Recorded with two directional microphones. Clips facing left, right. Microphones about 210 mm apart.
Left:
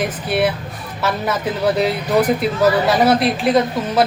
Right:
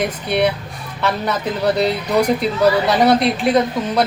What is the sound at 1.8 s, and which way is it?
Speech, 5° left (ahead or behind).